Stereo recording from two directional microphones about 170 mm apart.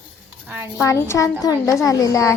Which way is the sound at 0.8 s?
15° left (ahead or behind).